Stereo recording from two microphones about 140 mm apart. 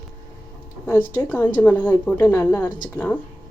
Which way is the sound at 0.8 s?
15° left (ahead or behind).